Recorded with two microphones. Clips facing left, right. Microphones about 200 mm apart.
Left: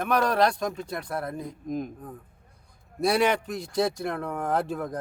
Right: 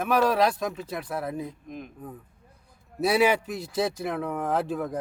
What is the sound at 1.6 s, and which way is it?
Speech, 40° left (ahead or behind).